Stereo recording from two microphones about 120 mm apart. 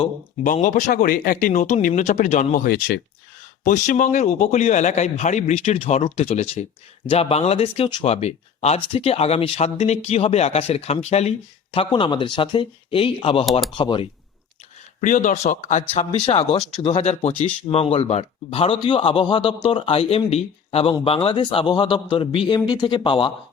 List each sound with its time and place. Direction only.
0.4 s speech: 90° left
3.6 s a man's voice: 90° left; by 13.4 s 50° left (ahead or behind)
13.4 s speech: centre (ahead or behind)
13.7 s speech: 45° left (ahead or behind)
15.0 s a man's voice: 90° left; by 23.3 s 45° left (ahead or behind)